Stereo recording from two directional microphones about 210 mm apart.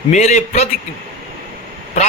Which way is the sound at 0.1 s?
35° left (ahead or behind).